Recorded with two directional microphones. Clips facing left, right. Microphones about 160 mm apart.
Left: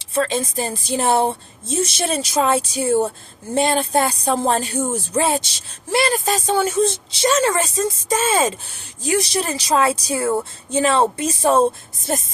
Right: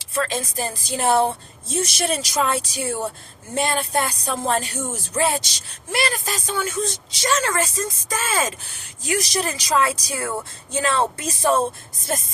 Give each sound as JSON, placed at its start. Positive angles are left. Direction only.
{"t": 0.0, "sound": "speech", "side_deg": 25}